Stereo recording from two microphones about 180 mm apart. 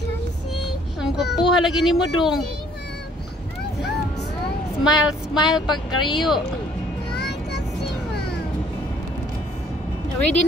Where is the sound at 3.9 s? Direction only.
70° left (ahead or behind).